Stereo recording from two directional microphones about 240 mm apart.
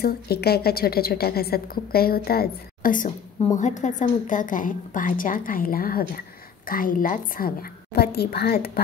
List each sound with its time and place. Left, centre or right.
0.0 s a woman's voice: left